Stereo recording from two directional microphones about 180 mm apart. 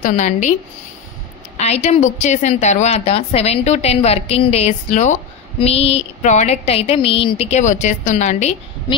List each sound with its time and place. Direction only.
0.0 s a woman's voice: 40° left (ahead or behind)
1.6 s a woman's voice: 40° left (ahead or behind)